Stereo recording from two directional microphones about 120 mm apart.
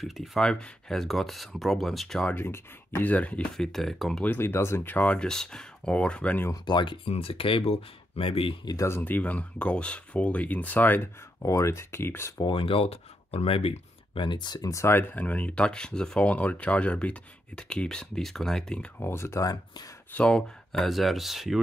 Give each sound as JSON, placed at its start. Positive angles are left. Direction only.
{"t": 0.0, "sound": "speech", "side_deg": 0}
{"t": 2.3, "sound": "speech", "side_deg": 20}
{"t": 4.2, "sound": "speech", "side_deg": 15}
{"t": 6.5, "sound": "speech", "side_deg": 40}
{"t": 7.1, "sound": "speech", "side_deg": 55}
{"t": 8.6, "sound": "speech", "side_deg": 25}
{"t": 12.4, "sound": "speech", "side_deg": 45}
{"t": 18.9, "sound": "speech", "side_deg": 20}
{"t": 20.1, "sound": "speech", "side_deg": 10}